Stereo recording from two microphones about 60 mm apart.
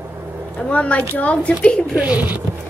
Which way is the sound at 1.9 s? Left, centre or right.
Right.